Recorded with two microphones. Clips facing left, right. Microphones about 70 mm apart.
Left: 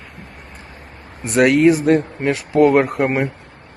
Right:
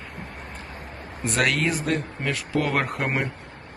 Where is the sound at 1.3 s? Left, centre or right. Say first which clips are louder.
Left 11 dB; left.